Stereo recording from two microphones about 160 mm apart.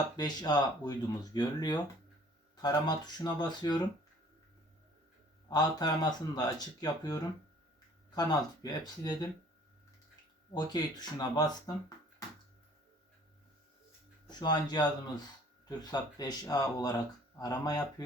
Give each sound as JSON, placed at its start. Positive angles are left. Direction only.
{"t": 0.2, "sound": "speech", "side_deg": 25}
{"t": 5.5, "sound": "speech", "side_deg": 25}
{"t": 10.5, "sound": "speech", "side_deg": 25}
{"t": 14.3, "sound": "speech", "side_deg": 25}